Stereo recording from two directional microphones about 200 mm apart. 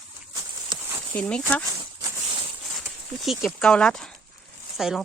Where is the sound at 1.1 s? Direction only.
5° left (ahead or behind).